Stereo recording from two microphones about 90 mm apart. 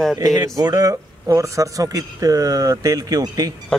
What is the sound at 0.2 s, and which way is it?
A man's voice, 45° right (ahead or behind).